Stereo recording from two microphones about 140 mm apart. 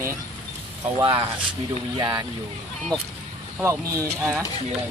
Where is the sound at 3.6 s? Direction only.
20° right (ahead or behind).